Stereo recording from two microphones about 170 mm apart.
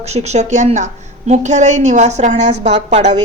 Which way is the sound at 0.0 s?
40° right (ahead or behind).